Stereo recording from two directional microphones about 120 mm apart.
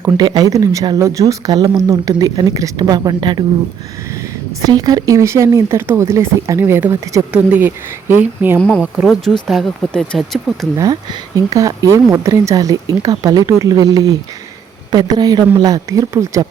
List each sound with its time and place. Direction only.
0.2 s speech: 35° right (ahead or behind)
4.6 s a woman's voice: 35° right (ahead or behind); by 8.5 s 15° right (ahead or behind)
8.5 s speech: 10° left (ahead or behind)
10.8 s speech: 30° right (ahead or behind)